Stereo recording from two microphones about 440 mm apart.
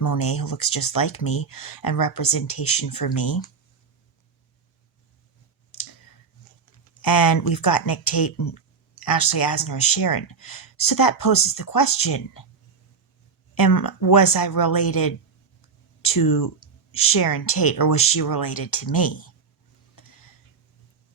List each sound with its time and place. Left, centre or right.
0.0 s speech: left
7.0 s speech: left
13.6 s speech: left
16.6 s a sound: centre
17.2 s speech: left
20.0 s a sound: left